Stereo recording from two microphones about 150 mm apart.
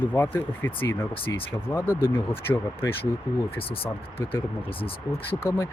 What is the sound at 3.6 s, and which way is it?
Speech, 40° left (ahead or behind).